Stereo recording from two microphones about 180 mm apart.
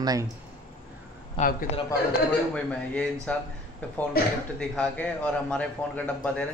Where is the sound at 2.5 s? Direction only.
5° left (ahead or behind).